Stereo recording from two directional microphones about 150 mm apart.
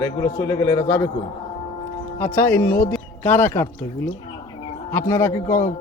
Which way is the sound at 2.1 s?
15° left (ahead or behind).